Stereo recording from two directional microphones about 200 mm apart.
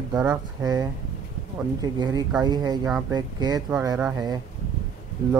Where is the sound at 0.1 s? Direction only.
5° right (ahead or behind).